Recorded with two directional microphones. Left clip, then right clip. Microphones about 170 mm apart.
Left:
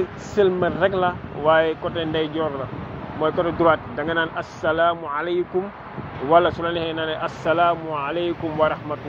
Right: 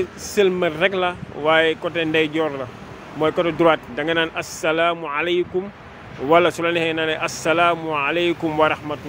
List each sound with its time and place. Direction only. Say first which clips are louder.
0.4 s speech: right 1 dB; 35° right (ahead or behind)